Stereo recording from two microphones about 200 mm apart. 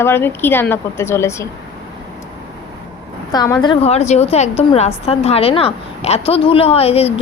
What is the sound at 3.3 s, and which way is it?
A woman's voice, 20° left (ahead or behind).